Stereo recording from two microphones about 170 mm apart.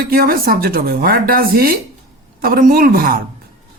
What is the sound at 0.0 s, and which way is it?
Speech, 60° right (ahead or behind).